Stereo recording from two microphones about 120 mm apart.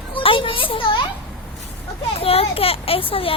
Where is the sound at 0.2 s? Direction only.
45° left (ahead or behind).